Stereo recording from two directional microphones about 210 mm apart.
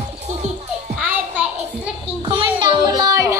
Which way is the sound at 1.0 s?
5° right (ahead or behind).